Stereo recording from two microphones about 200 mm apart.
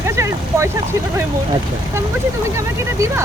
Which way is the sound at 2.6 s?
15° right (ahead or behind).